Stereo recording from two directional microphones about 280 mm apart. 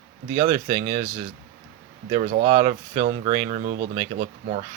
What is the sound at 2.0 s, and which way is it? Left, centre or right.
Speech, right.